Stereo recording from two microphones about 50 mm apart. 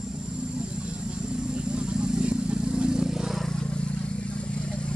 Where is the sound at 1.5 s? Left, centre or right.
Centre.